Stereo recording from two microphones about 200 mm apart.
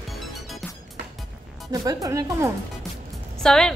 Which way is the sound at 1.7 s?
20° right (ahead or behind).